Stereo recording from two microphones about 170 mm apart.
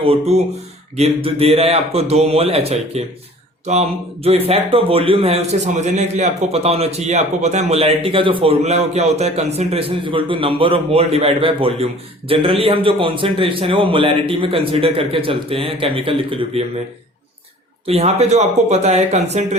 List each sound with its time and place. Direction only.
0.0 s a man's voice: 35° right (ahead or behind)
17.8 s a man's voice: 40° right (ahead or behind)